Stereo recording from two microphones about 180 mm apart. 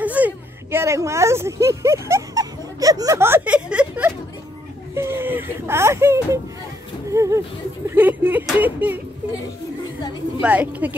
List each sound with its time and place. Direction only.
0.0 s a sound: 10° right (ahead or behind)
4.9 s whimper: 15° right (ahead or behind)
7.1 s speech: 15° right (ahead or behind)
10.4 s speech: 10° right (ahead or behind)